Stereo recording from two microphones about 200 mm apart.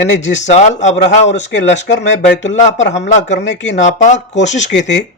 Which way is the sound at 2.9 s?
35° left (ahead or behind).